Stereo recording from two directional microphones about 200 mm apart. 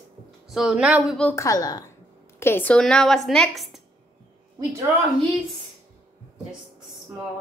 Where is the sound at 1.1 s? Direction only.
10° left (ahead or behind).